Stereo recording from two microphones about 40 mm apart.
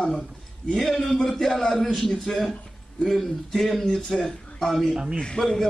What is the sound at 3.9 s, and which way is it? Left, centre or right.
Speech, centre.